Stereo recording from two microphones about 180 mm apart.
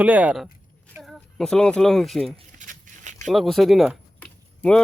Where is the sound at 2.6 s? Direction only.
45° right (ahead or behind).